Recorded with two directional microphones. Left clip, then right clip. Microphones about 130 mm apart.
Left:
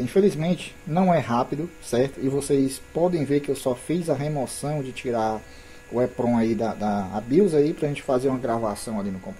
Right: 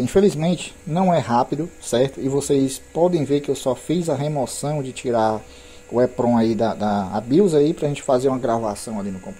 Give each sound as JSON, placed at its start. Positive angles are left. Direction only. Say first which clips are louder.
{"t": 0.0, "sound": "speech", "louder": "right 4 dB", "side_deg": -40}
{"t": 1.0, "sound": "speech", "louder": "right 4 dB", "side_deg": -20}
{"t": 1.9, "sound": "speech", "louder": "right 4 dB", "side_deg": -35}
{"t": 8.6, "sound": "speech", "louder": "right 2 dB", "side_deg": -15}